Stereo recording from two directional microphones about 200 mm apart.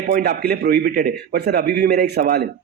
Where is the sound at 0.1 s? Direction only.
55° right (ahead or behind).